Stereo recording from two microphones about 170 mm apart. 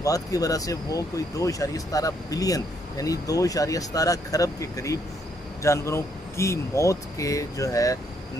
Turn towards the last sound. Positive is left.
turn(degrees=20)  # may be behind; listen again after turning